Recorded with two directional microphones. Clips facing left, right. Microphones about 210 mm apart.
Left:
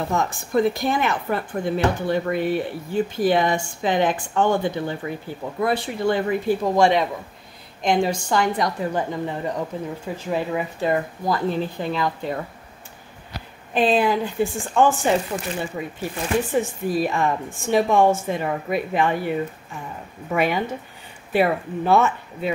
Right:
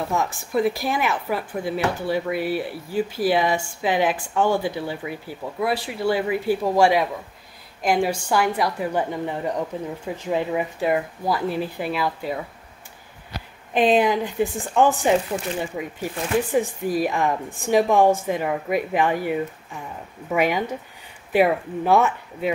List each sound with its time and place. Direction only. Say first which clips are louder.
0.1 s a woman's voice: left 3 dB; 5° right (ahead or behind)
13.7 s a woman's voice: right 1 dB; 15° right (ahead or behind)